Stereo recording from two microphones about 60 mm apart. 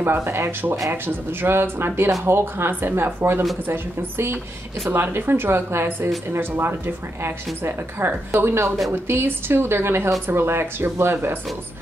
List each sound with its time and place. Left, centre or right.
0.0 s speech: right